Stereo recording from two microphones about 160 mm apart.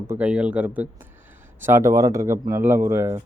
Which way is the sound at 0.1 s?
10° right (ahead or behind).